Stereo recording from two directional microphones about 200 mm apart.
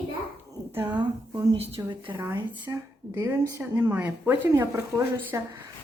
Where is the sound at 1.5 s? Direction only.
30° right (ahead or behind); by 5.6 s 10° right (ahead or behind).